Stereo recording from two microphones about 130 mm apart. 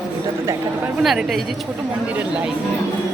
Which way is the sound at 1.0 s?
Centre (ahead or behind).